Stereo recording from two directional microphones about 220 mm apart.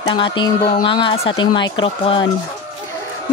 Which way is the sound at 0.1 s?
20° left (ahead or behind).